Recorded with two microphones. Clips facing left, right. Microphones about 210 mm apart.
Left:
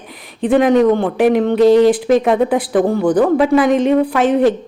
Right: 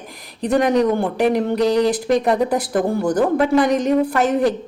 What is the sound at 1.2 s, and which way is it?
Speech, 5° left (ahead or behind).